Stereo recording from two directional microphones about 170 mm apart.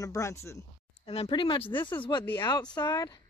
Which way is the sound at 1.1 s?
30° left (ahead or behind).